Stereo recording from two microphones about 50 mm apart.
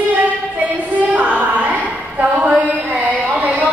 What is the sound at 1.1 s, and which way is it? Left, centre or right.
Female singing, right.